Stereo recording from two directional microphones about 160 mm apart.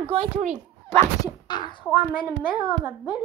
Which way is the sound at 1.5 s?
30° left (ahead or behind).